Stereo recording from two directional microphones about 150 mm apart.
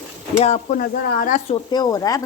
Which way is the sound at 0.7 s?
70° left (ahead or behind).